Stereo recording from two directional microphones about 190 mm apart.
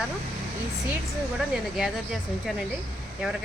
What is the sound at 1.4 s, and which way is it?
Speech, centre (ahead or behind).